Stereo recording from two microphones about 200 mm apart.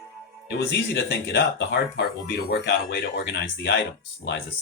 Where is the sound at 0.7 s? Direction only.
60° left (ahead or behind).